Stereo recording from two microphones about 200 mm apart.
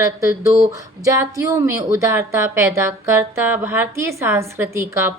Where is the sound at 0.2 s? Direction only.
15° right (ahead or behind).